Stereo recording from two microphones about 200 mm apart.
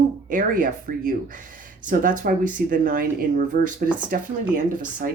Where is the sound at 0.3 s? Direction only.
40° right (ahead or behind).